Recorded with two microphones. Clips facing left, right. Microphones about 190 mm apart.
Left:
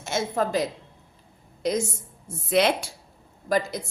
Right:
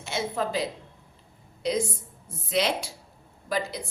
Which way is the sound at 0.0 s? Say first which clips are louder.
Left 3 dB; 45° left (ahead or behind).